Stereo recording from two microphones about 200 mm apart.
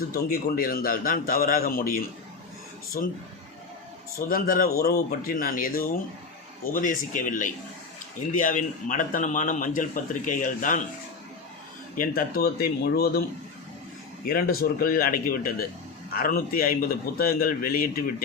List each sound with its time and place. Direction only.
0.1 s a man's voice: 50° left (ahead or behind)
4.3 s a man's voice: 45° left (ahead or behind)
11.9 s a man's voice: 50° left (ahead or behind)
14.3 s a man's voice: 45° left (ahead or behind)